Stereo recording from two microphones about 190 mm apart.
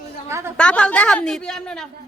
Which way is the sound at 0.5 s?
5° left (ahead or behind).